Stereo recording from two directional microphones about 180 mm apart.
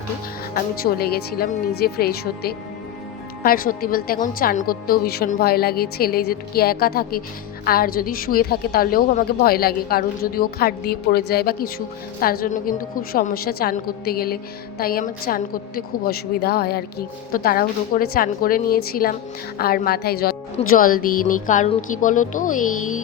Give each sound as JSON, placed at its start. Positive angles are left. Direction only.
{"t": 0.5, "sound": "a woman's voice", "side_deg": 60}